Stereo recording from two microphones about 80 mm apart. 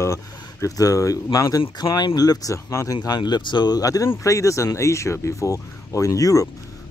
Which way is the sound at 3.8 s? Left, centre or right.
Left.